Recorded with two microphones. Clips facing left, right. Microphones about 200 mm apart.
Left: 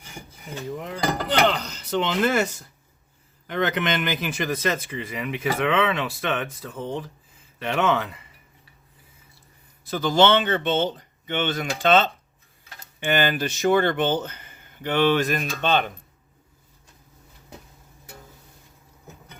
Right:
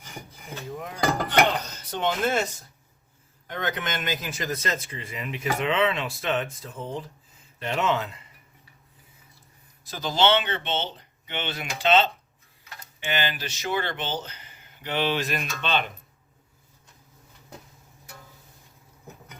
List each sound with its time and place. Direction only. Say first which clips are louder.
0.8 s speech: right 1 dB; 75° left (ahead or behind)
6.7 s speech: left 4 dB; 80° left
7.6 s speech: left 3 dB; 70° left (ahead or behind)
9.8 s speech: left 5 dB; 55° left (ahead or behind)